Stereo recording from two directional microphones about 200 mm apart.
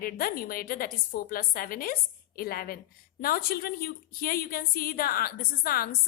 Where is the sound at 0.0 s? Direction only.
45° left (ahead or behind).